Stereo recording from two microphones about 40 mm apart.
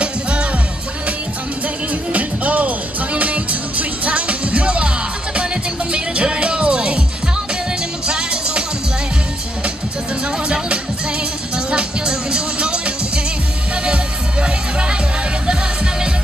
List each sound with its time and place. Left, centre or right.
0.0 s music: right
2.1 s music: right
8.1 s music: right
10.2 s music: right